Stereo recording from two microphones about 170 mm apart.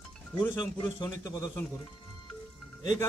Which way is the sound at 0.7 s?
25° left (ahead or behind).